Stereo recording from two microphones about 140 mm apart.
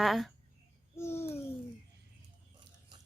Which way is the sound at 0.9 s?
20° left (ahead or behind).